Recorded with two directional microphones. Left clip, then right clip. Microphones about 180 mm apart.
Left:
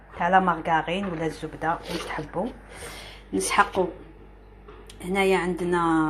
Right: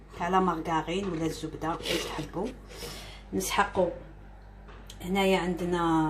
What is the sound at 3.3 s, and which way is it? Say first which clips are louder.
Speech: left 6 dB; 25° left (ahead or behind).